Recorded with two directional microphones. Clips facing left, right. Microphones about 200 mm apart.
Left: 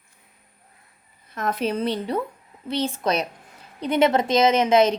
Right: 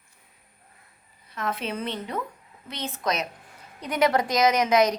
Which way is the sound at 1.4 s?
40° left (ahead or behind).